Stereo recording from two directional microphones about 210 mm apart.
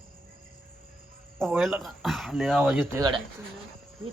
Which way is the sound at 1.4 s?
Centre (ahead or behind).